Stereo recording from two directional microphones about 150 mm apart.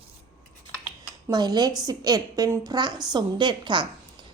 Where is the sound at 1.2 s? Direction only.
30° right (ahead or behind).